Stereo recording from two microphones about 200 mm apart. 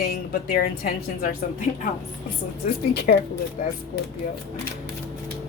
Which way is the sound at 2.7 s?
50° left (ahead or behind).